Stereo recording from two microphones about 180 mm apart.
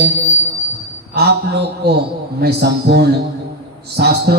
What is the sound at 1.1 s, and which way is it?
Music, 65° right (ahead or behind).